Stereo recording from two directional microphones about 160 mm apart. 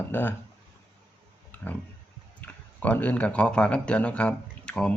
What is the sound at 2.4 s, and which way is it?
Speech, 10° left (ahead or behind).